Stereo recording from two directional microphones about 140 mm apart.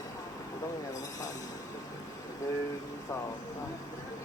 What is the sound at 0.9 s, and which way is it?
Train, 25° left (ahead or behind).